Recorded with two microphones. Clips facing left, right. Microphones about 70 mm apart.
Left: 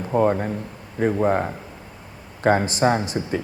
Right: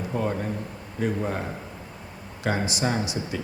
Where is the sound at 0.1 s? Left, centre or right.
Left.